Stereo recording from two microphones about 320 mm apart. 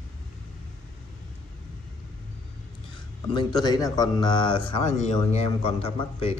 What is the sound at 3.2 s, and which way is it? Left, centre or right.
Speech, centre.